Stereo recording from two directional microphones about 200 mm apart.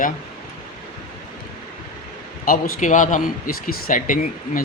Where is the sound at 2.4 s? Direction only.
40° left (ahead or behind).